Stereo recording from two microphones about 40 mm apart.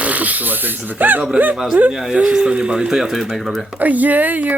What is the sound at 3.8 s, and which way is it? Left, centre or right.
Speech, right.